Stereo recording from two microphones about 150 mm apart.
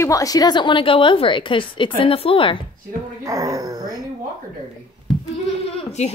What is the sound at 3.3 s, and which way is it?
Speech, 20° right (ahead or behind).